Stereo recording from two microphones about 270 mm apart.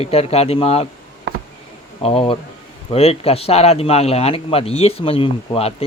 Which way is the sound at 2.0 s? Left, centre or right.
Left.